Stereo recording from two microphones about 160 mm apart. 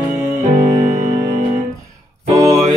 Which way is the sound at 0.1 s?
50° right (ahead or behind).